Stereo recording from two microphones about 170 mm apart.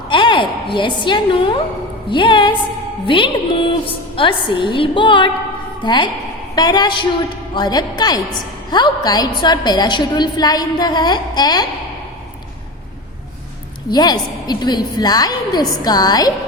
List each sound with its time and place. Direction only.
0.1 s a woman's voice: 30° left (ahead or behind)
13.9 s a woman's voice: 25° left (ahead or behind)